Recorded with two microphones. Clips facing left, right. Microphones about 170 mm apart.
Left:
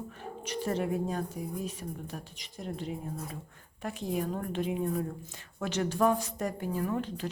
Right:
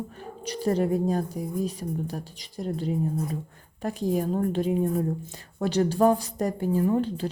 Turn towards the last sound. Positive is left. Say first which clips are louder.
# right 8 dB
turn(degrees=-30)  # may be behind; listen again after turning